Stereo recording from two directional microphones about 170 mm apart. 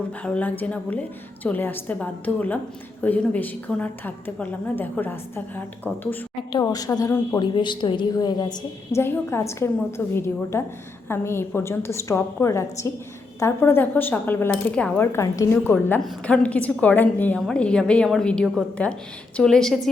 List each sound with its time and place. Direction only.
0.2 s a woman's voice: 10° left (ahead or behind)
6.5 s a woman's voice: 20° left (ahead or behind)
7.5 s a woman's voice: 25° left (ahead or behind); by 19.9 s centre (ahead or behind)